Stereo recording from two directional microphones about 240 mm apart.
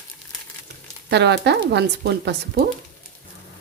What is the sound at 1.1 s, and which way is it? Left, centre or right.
Speech, right.